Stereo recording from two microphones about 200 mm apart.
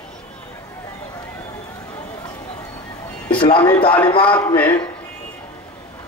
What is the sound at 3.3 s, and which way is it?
Speech, 25° left (ahead or behind).